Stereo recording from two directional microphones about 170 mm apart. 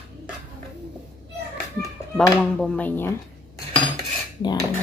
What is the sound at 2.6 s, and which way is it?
Speech, 10° left (ahead or behind).